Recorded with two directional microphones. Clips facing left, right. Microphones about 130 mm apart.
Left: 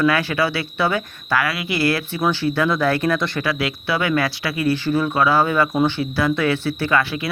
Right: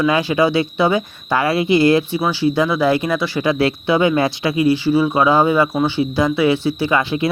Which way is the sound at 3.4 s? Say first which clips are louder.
Right 6 dB; 25° right (ahead or behind).